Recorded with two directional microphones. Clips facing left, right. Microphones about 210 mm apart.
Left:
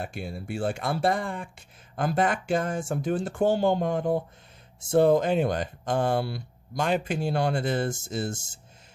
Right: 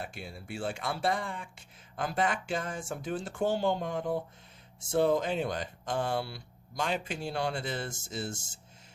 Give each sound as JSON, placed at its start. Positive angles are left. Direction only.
{"t": 0.0, "sound": "speech", "side_deg": 45}